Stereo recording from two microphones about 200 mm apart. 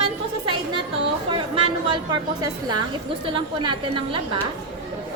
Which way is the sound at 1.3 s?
25° right (ahead or behind).